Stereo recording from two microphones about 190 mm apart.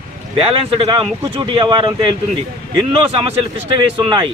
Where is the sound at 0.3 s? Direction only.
30° right (ahead or behind).